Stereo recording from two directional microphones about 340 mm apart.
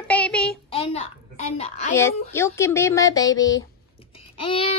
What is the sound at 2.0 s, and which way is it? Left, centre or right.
Speech, centre.